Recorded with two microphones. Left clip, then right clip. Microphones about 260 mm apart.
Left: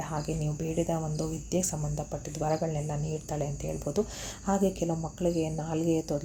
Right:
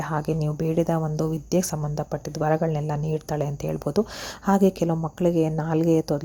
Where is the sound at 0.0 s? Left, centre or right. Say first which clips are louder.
Right 7 dB; right.